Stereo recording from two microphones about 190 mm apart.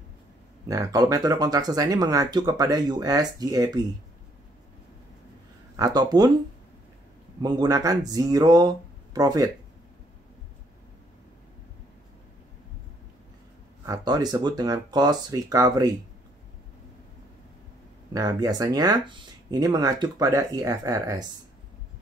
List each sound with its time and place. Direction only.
0.7 s speech: 15° right (ahead or behind)
5.8 s speech: 20° right (ahead or behind)
7.4 s speech: 20° right (ahead or behind)
13.8 s speech: 20° right (ahead or behind)
18.1 s speech: 20° right (ahead or behind)